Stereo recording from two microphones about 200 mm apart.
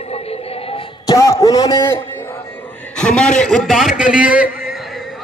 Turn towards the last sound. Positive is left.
turn(degrees=0)  # may be behind; listen again after turning